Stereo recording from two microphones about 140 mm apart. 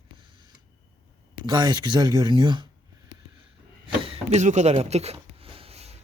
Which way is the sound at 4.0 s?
45° right (ahead or behind).